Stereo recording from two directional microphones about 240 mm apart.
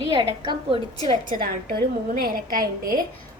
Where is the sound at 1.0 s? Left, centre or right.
Right.